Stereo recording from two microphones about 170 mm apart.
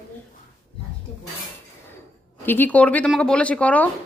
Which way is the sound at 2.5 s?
10° left (ahead or behind).